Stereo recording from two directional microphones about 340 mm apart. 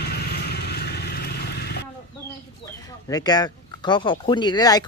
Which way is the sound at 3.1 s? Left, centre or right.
Centre.